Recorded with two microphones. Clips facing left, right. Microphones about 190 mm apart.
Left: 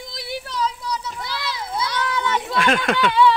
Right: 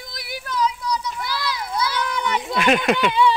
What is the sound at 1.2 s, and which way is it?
Children playing, 25° left (ahead or behind).